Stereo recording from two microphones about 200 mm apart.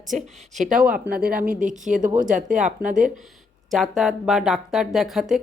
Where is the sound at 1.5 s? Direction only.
40° right (ahead or behind).